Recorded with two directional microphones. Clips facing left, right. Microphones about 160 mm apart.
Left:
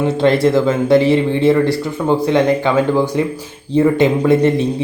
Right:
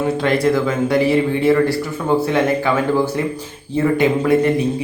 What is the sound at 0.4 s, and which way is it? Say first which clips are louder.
Speech: left 3 dB; 25° left (ahead or behind).